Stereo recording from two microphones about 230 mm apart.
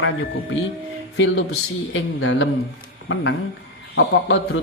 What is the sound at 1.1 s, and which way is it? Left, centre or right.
Speech, left.